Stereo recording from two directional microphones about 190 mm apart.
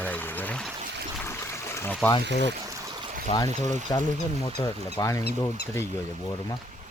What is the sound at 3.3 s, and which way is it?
Speech, 20° left (ahead or behind).